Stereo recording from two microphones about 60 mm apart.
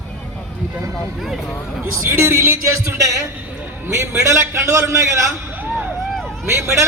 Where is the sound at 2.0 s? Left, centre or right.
Right.